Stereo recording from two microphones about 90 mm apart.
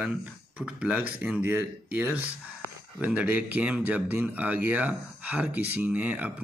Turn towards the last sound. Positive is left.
turn(degrees=-15)  # may be behind; listen again after turning